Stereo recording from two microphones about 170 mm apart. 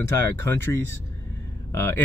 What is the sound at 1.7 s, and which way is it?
Speech, 15° left (ahead or behind).